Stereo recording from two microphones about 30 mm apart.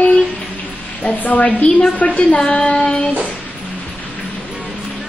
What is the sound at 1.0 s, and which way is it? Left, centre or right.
A woman's voice, left.